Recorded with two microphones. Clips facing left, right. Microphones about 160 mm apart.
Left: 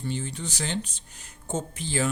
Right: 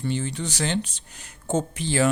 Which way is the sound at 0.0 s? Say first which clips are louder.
Right 4 dB; 75° right (ahead or behind).